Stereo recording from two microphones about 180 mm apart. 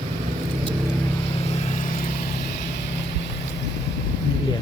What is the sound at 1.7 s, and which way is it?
Vehicle, 40° left (ahead or behind).